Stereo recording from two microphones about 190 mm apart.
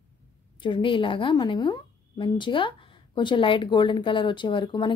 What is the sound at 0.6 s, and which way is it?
A woman's voice, 25° left (ahead or behind).